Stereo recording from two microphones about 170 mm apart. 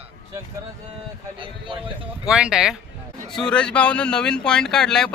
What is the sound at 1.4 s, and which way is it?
Speech, 30° right (ahead or behind).